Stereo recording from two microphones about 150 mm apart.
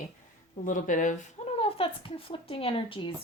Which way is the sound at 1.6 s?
35° left (ahead or behind).